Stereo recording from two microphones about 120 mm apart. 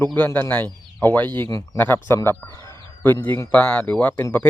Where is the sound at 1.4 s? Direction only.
30° left (ahead or behind).